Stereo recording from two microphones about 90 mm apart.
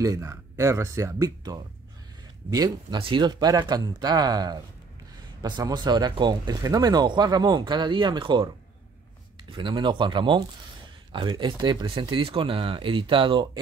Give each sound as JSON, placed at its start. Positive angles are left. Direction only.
{"t": 0.0, "sound": "speech", "side_deg": -35}
{"t": 3.0, "sound": "speech", "side_deg": -65}
{"t": 9.5, "sound": "speech", "side_deg": -60}